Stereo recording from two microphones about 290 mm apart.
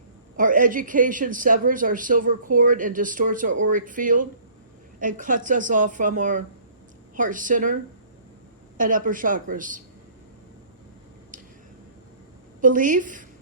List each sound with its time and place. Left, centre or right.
0.3 s a man's voice: right
8.8 s a man's voice: right
12.6 s a man's voice: right